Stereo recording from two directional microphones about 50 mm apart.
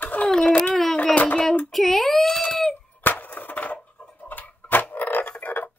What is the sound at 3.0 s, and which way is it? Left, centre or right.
Music, left.